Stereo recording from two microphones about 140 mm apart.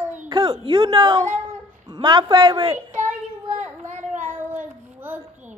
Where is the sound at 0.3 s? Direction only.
30° right (ahead or behind).